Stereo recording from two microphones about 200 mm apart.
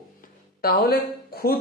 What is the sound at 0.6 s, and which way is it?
Speech, 50° left (ahead or behind).